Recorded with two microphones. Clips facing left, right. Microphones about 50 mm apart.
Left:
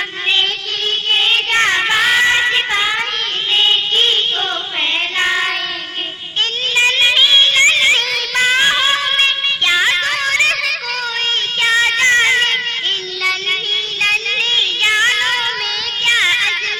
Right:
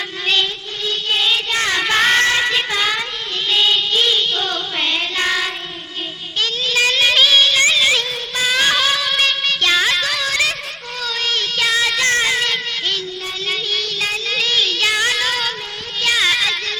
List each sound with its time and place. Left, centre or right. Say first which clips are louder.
1.1 s child singing: left 4 dB; left
1.9 s music: left 1 dB; centre
2.2 s music: left 3 dB; centre; by 4.2 s left
5.1 s child singing: left 4 dB; left
6.7 s child singing: left 2 dB; left
8.6 s child singing: left 2 dB; left
9.6 s music: left 2 dB; centre
10.0 s music: left 4 dB; left
11.6 s child singing: left 5 dB; left
14.8 s child singing: left 4 dB; left